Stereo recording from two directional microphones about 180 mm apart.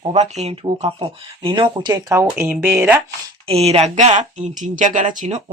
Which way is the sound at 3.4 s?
35° right (ahead or behind).